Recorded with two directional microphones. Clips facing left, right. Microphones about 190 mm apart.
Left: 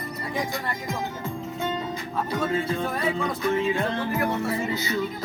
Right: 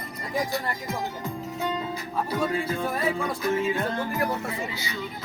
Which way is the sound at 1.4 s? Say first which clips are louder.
Even; 5° right (ahead or behind).